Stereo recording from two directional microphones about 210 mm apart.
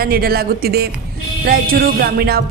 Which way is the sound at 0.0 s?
45° right (ahead or behind).